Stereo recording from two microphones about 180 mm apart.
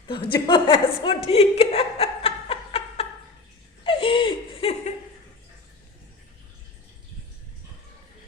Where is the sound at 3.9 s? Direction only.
30° left (ahead or behind).